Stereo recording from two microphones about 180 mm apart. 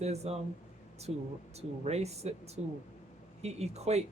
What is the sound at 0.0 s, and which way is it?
Speech, 35° right (ahead or behind).